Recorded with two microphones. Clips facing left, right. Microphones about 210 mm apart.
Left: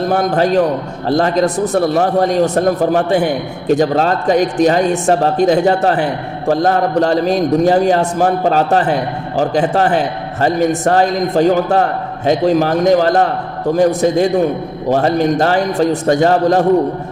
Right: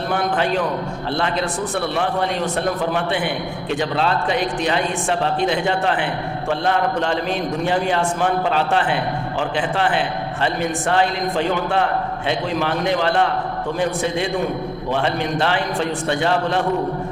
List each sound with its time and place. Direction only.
0.0 s a man's voice: 40° left (ahead or behind)